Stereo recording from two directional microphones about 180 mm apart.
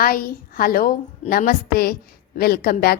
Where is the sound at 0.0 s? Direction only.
50° left (ahead or behind).